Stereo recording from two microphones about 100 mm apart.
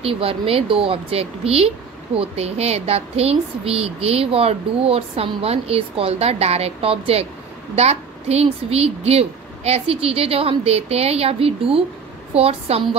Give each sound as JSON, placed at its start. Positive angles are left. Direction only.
{"t": 0.0, "sound": "speech", "side_deg": -70}
{"t": 2.1, "sound": "a woman's voice", "side_deg": -90}
{"t": 7.7, "sound": "a woman's voice", "side_deg": -90}
{"t": 12.4, "sound": "a woman's voice", "side_deg": -85}